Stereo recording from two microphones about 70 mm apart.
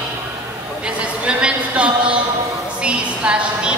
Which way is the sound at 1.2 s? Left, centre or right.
Centre.